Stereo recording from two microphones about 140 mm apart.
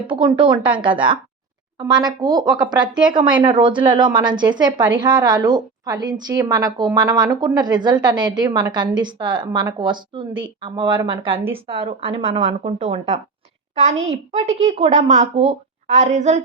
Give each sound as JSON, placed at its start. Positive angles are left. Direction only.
{"t": 0.1, "sound": "a woman's voice", "side_deg": -35}
{"t": 14.3, "sound": "a woman's voice", "side_deg": -50}